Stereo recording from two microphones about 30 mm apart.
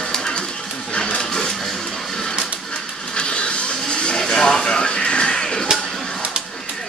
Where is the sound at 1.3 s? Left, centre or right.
Centre.